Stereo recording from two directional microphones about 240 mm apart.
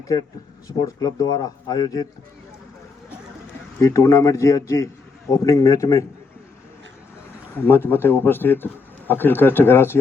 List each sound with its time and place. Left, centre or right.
0.7 s a man's voice: centre
3.8 s a man's voice: centre
7.6 s a man's voice: centre